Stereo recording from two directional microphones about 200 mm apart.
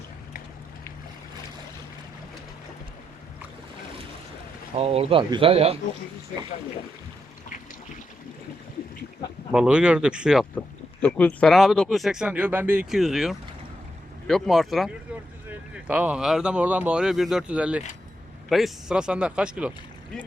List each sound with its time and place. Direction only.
4.7 s speech: 30° right (ahead or behind)
9.5 s speech: 5° right (ahead or behind)
11.0 s speech: 5° left (ahead or behind)